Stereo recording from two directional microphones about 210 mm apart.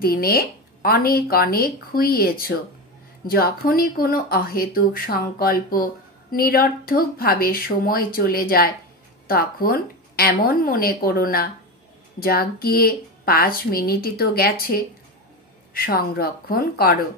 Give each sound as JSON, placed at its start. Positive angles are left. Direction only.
{"t": 0.0, "sound": "speech", "side_deg": 45}